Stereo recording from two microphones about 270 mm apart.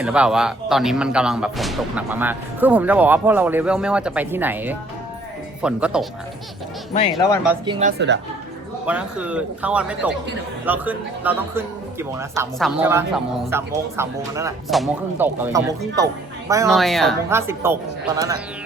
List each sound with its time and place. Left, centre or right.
0.0 s speech: centre
7.6 s a man's voice: centre
7.9 s a woman's voice: right
8.9 s a man's voice: centre
16.6 s speech: centre
17.2 s a man's voice: centre